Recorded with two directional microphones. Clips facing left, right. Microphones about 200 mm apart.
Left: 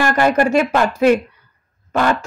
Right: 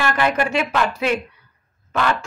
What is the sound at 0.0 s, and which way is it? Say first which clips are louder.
A woman's voice: left 5 dB; 45° left (ahead or behind).